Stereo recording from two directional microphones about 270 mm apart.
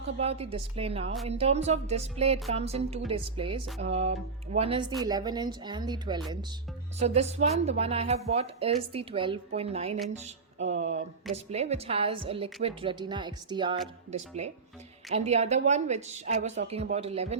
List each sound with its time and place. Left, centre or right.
0.2 s a woman's voice: right
3.8 s music: right
4.5 s a woman's voice: right